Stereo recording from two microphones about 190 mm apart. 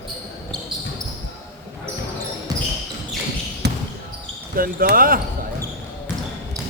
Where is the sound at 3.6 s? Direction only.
60° right (ahead or behind).